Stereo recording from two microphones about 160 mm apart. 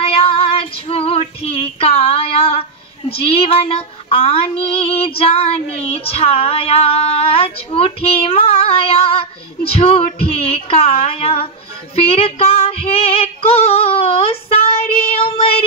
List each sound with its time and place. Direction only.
0.0 s female singing: 35° left (ahead or behind)
3.1 s speech: 35° left (ahead or behind)
11.9 s female singing: 40° left (ahead or behind)